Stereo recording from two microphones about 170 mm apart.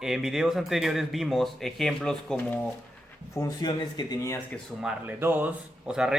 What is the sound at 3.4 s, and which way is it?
Speech, 25° left (ahead or behind).